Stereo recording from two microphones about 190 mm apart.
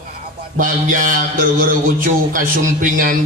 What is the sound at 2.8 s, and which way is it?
Speech, 45° right (ahead or behind).